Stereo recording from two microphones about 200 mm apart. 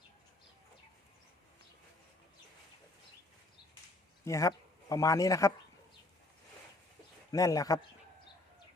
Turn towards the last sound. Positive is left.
turn(degrees=15)  # may be behind; listen again after turning